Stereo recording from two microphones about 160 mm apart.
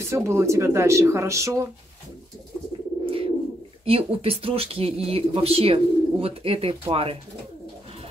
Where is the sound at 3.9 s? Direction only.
35° right (ahead or behind).